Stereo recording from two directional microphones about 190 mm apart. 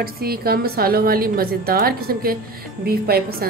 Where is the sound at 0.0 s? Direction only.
55° right (ahead or behind).